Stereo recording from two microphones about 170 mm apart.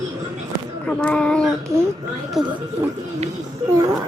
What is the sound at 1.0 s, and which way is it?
Speech, 5° left (ahead or behind).